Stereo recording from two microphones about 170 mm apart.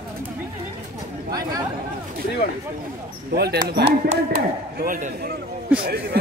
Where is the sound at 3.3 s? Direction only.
70° right (ahead or behind).